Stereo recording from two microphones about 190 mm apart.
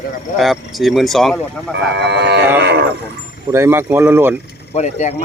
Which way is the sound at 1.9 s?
65° right (ahead or behind).